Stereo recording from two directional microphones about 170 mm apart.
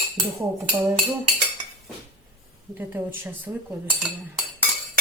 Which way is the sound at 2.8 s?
10° right (ahead or behind).